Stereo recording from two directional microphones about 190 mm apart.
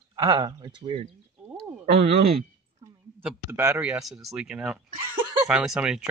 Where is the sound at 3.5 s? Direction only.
15° right (ahead or behind).